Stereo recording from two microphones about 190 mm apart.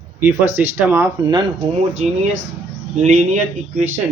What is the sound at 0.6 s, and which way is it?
Speech, 10° right (ahead or behind).